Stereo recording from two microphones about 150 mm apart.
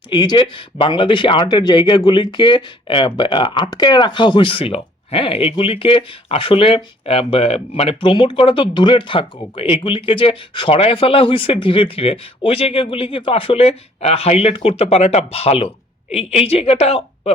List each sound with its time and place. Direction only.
0.1 s a woman's voice: 30° left (ahead or behind)